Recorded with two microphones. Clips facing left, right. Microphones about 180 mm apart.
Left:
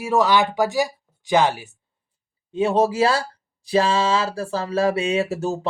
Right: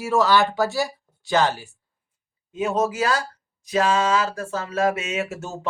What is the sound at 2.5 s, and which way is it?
Speech, 30° left (ahead or behind).